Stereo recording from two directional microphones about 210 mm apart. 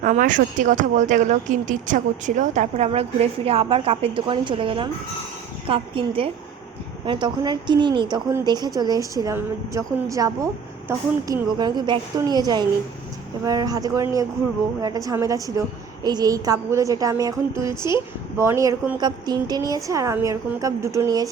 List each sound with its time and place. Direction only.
0.0 s a woman's voice: 40° right (ahead or behind); by 21.2 s 15° right (ahead or behind)